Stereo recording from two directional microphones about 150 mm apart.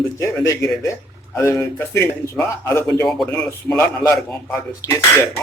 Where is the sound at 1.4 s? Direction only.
20° left (ahead or behind).